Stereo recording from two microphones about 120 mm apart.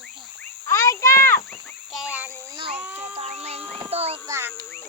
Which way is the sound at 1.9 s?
5° right (ahead or behind).